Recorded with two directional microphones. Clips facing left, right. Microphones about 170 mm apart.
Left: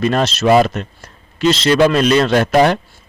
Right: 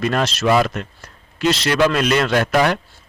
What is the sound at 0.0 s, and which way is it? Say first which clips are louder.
Speech: left 4 dB; 25° left (ahead or behind).